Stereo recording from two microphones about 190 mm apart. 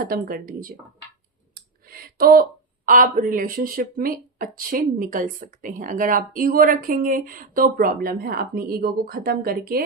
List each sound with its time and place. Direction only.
0.0 s speech: 50° right (ahead or behind)
1.9 s speech: 50° right (ahead or behind)